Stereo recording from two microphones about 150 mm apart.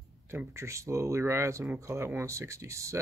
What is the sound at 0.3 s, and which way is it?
Speech, 15° right (ahead or behind).